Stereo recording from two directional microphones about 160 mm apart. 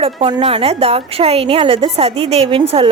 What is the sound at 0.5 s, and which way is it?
A woman's voice, 40° right (ahead or behind).